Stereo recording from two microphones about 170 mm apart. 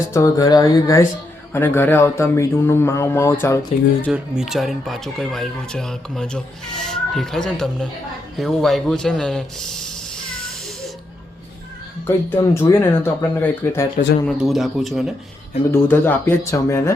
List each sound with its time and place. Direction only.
0.1 s speech: 20° left (ahead or behind)
4.1 s speech: 5° right (ahead or behind)
12.0 s speech: 15° left (ahead or behind)
14.3 s speech: centre (ahead or behind)
15.7 s speech: 15° left (ahead or behind)